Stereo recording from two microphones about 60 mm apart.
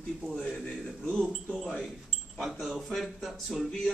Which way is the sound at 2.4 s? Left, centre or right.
Centre.